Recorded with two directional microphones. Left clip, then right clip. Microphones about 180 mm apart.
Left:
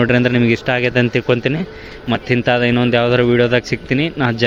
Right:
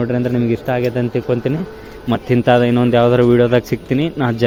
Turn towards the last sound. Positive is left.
turn(degrees=-15)  # may be behind; listen again after turning